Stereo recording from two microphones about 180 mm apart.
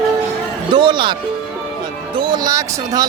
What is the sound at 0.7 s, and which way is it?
Speech, 25° right (ahead or behind).